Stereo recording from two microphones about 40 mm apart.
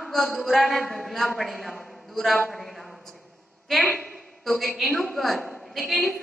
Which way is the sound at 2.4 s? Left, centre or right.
Centre.